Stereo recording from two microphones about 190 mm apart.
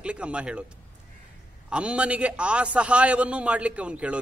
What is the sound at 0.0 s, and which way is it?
Speech, 5° right (ahead or behind).